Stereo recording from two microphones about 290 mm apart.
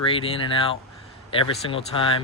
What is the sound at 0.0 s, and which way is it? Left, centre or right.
Speech, centre.